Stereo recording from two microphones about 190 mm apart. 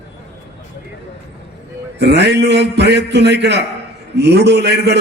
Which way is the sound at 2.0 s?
65° right (ahead or behind).